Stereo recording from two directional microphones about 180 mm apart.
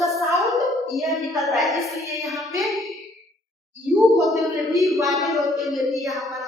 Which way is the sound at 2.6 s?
Centre (ahead or behind).